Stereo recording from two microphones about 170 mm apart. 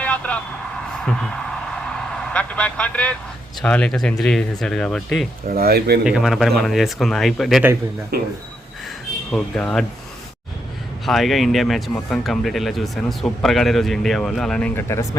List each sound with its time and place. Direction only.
0.0 s vehicle: 10° left (ahead or behind)
3.6 s speech: 5° left (ahead or behind)
5.5 s speech: 65° right (ahead or behind)
6.1 s speech: centre (ahead or behind)
8.1 s speech: 65° right (ahead or behind)
9.3 s speech: 5° left (ahead or behind)
11.0 s speech: centre (ahead or behind)